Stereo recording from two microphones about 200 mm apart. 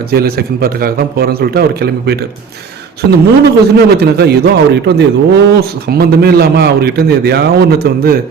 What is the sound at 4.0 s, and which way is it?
A man's voice, 55° right (ahead or behind).